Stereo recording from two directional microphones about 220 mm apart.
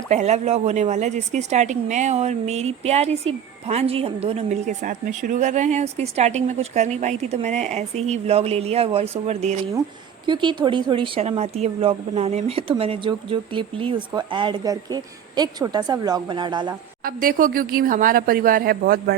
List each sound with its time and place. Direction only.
0.1 s a woman's voice: 30° right (ahead or behind)
17.0 s a woman's voice: 40° right (ahead or behind)